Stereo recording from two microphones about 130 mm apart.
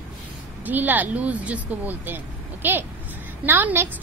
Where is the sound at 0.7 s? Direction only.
15° right (ahead or behind).